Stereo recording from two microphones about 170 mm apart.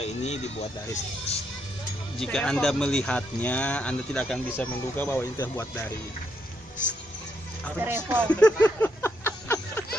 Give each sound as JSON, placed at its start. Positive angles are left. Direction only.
{"t": 0.0, "sound": "speech", "side_deg": 40}
{"t": 2.1, "sound": "speech", "side_deg": 5}
{"t": 7.8, "sound": "speech", "side_deg": -10}
{"t": 8.3, "sound": "speech", "side_deg": 5}
{"t": 8.6, "sound": "a sound", "side_deg": 15}